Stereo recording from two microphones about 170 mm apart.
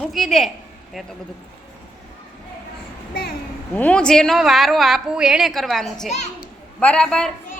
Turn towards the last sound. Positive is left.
turn(degrees=5)  # may be behind; listen again after turning